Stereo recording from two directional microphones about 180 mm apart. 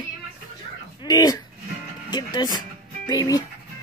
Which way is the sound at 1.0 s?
20° left (ahead or behind).